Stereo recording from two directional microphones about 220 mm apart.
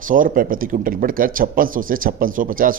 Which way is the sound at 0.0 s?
40° right (ahead or behind).